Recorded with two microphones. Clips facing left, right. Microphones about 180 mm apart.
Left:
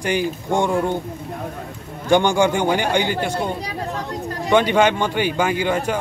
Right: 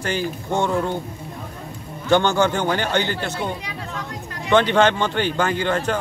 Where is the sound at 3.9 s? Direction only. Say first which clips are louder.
Left 5 dB; 35° left (ahead or behind).